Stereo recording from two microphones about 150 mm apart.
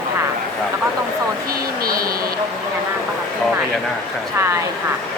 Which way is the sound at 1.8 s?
80° right.